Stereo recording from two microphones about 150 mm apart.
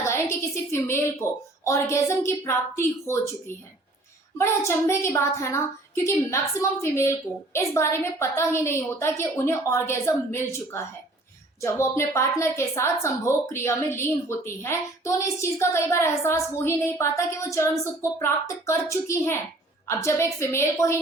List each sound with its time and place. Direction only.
0.0 s a woman's voice: 20° left (ahead or behind)
4.4 s a woman's voice: 15° left (ahead or behind)